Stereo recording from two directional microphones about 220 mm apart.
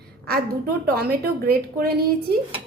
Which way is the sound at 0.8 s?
45° right (ahead or behind).